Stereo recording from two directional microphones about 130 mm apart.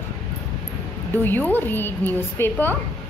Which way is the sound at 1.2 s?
15° left (ahead or behind).